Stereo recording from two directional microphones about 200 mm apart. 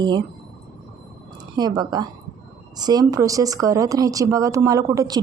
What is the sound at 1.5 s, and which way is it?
Speech, 20° right (ahead or behind).